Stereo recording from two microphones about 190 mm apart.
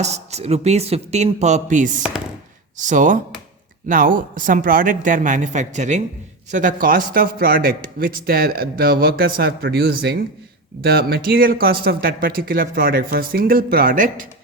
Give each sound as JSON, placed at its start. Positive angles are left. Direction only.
{"t": 0.0, "sound": "a man's voice", "side_deg": -35}